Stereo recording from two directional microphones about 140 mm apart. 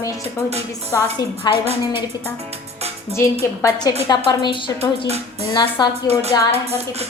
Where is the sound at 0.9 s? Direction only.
20° left (ahead or behind).